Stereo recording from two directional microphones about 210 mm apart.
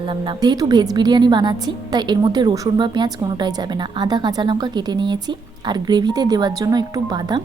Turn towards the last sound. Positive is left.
turn(degrees=-20)  # may be behind; listen again after turning